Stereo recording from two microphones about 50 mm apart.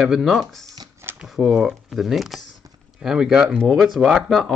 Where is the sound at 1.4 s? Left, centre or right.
Centre.